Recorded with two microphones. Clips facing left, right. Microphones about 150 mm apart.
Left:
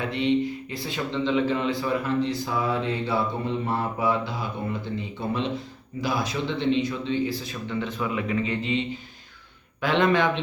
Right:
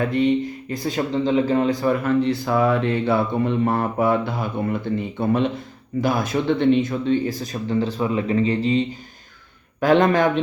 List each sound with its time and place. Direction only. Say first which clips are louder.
0.0 s speech: right 4 dB; 45° right (ahead or behind)
9.8 s speech: right 5 dB; 45° right (ahead or behind)